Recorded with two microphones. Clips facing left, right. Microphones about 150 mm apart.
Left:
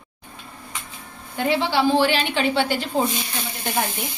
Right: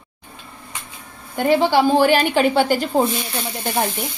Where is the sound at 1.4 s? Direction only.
45° right (ahead or behind).